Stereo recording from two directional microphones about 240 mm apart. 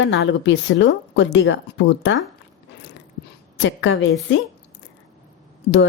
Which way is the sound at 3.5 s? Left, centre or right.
Left.